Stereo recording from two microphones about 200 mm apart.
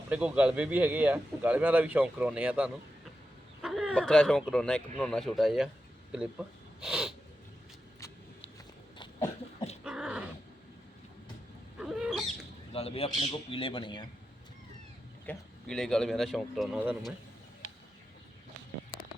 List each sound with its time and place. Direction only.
0.1 s speech: 5° right (ahead or behind)
6.8 s speech: 5° right (ahead or behind)
9.0 s a sound: 20° left (ahead or behind)
9.8 s dog: 5° right (ahead or behind)
11.8 s cat: 5° right (ahead or behind)
12.7 s a man's voice: 30° left (ahead or behind)
15.3 s speech: 5° left (ahead or behind)